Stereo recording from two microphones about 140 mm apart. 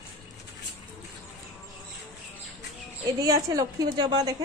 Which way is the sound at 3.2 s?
25° right (ahead or behind).